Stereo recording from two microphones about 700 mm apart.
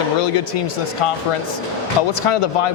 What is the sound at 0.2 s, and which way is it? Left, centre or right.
Speech, left.